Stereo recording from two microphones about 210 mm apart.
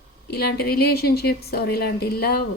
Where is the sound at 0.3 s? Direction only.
50° left (ahead or behind).